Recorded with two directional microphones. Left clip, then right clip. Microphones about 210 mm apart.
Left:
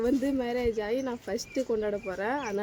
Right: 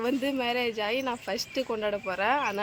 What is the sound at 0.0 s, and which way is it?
Speech, 20° left (ahead or behind).